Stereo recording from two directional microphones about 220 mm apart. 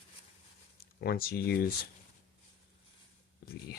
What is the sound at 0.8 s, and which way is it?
Speech, 45° left (ahead or behind).